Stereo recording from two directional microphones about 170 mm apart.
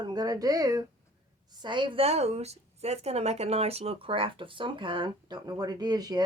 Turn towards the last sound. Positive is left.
turn(degrees=-25)  # may be behind; listen again after turning